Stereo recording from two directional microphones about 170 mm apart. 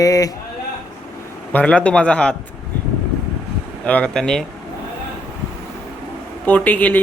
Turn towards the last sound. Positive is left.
turn(degrees=10)  # may be behind; listen again after turning